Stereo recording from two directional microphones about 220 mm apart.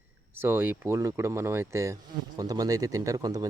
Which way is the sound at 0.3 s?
10° right (ahead or behind).